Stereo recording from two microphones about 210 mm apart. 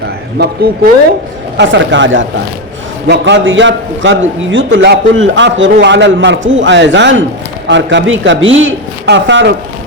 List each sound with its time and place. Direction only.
1.5 s a man's voice: 60° right (ahead or behind)